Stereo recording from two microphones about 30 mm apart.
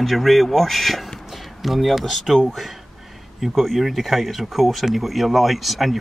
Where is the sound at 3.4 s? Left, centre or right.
Centre.